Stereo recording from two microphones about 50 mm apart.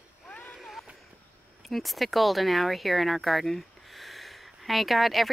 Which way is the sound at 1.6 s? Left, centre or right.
Centre.